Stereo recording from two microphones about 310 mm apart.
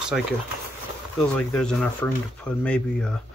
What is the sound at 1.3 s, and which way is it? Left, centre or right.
Speech, centre.